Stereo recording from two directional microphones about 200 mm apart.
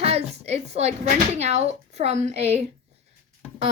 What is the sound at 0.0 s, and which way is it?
A woman's voice, 30° right (ahead or behind).